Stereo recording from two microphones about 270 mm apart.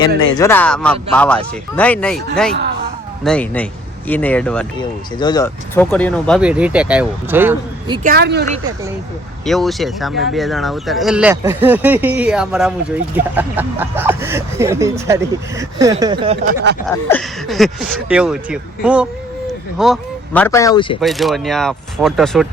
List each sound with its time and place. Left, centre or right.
0.2 s speech: centre
3.2 s speech: centre
4.8 s speech: centre
8.0 s speech: right
9.5 s speech: centre; by 16.6 s right
16.8 s speech: centre
21.0 s speech: centre